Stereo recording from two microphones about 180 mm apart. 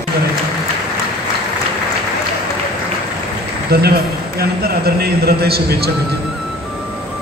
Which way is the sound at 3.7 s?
60° right (ahead or behind).